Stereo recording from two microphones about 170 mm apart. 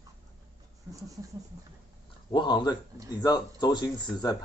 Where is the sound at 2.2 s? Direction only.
25° left (ahead or behind).